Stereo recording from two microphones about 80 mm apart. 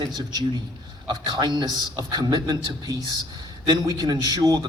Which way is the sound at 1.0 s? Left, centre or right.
Right.